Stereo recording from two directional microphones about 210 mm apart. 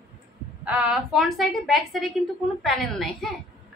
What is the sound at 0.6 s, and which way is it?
A woman's voice, 5° right (ahead or behind).